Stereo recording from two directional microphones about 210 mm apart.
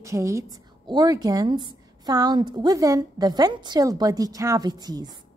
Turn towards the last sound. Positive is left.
turn(degrees=-20)  # may be behind; listen again after turning